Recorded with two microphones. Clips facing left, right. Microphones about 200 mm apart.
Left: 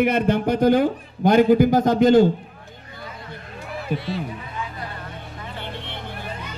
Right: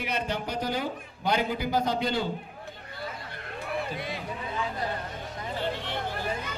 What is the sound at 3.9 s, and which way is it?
Speech, 55° left (ahead or behind).